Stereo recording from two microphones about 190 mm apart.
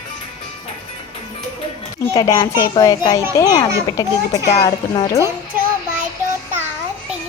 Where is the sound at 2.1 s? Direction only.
20° left (ahead or behind).